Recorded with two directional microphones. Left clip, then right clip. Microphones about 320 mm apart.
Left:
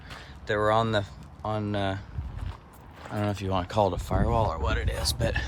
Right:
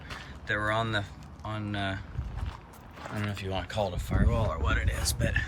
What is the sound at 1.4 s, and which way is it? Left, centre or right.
Speech, centre.